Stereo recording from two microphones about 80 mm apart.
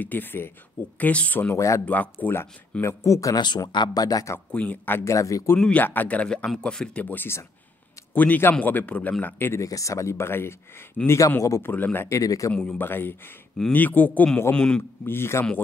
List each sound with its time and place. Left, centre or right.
0.0 s a man's voice: left
1.5 s speech: left
2.2 s a man's voice: left
2.8 s speech: left
3.3 s speech: left
4.5 s a man's voice: centre
5.1 s speech: left
5.7 s a man's voice: left
9.6 s speech: left
11.7 s a man's voice: left
12.2 s speech: left
12.7 s a man's voice: left; by 14.8 s centre
15.0 s speech: left